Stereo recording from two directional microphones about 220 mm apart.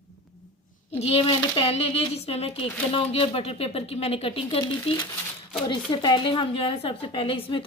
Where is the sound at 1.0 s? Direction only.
25° left (ahead or behind).